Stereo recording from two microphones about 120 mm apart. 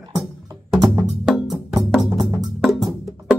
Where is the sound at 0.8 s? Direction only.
25° right (ahead or behind).